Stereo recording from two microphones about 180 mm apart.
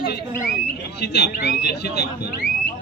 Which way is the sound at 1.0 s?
70° left (ahead or behind).